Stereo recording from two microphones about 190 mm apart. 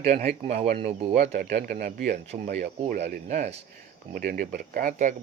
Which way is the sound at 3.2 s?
45° right (ahead or behind).